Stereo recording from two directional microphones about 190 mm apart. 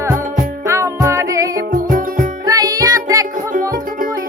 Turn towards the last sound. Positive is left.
turn(degrees=-20)  # may be behind; listen again after turning